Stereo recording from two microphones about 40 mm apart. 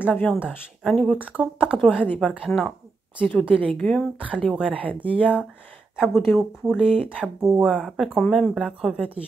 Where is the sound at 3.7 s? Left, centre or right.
Left.